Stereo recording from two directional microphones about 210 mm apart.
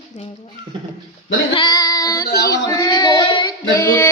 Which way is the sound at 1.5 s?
20° left (ahead or behind).